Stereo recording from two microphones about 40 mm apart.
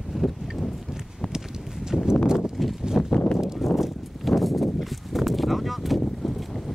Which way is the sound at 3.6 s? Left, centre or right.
Centre.